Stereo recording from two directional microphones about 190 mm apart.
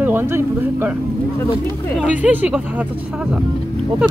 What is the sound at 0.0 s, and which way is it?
Speech, 10° right (ahead or behind).